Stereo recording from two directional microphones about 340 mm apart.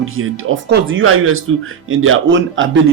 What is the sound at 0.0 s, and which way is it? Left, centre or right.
Speech, right.